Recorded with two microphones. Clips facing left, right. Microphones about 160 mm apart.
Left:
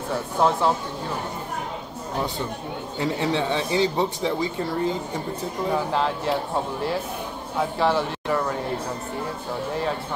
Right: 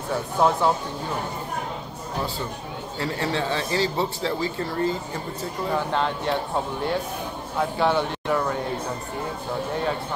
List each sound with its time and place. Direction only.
0.1 s speech: centre (ahead or behind)
3.0 s speech: 15° left (ahead or behind)
5.7 s speech: centre (ahead or behind)
7.7 s speech: centre (ahead or behind)